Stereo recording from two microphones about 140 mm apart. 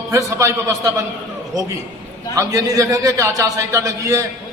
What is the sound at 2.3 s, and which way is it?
A man's voice, 25° right (ahead or behind).